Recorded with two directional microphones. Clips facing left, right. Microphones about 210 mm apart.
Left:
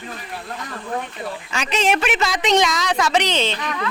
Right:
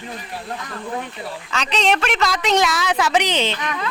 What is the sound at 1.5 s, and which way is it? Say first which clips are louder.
A woman's voice: even; 10° left (ahead or behind).